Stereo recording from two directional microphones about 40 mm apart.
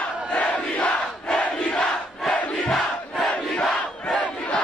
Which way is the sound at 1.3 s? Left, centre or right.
Centre.